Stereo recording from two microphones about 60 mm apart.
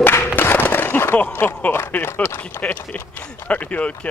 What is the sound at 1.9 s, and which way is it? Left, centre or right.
Run, left.